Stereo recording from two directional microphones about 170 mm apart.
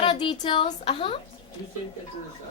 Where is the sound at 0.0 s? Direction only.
30° left (ahead or behind).